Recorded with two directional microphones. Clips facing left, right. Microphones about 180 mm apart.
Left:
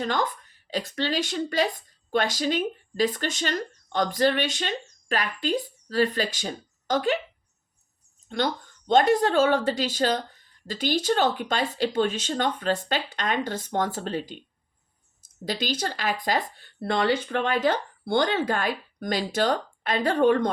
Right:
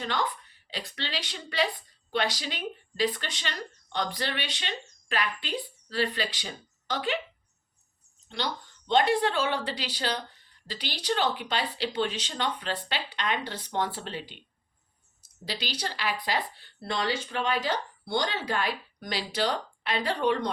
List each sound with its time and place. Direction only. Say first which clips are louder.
0.0 s a woman's voice: left 4 dB; 45° left (ahead or behind)
8.3 s speech: left 7 dB; 50° left (ahead or behind)